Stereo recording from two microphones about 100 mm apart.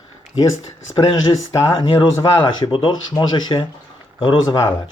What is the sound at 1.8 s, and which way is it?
Speech, 50° left (ahead or behind).